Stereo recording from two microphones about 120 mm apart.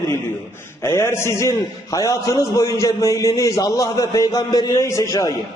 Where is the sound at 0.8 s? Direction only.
20° left (ahead or behind).